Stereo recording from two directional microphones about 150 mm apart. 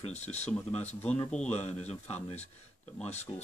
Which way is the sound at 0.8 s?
10° left (ahead or behind).